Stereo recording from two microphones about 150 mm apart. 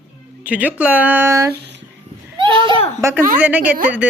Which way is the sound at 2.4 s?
35° right (ahead or behind).